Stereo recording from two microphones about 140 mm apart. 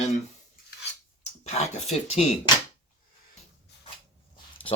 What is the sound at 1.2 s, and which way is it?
Speech, 50° left (ahead or behind).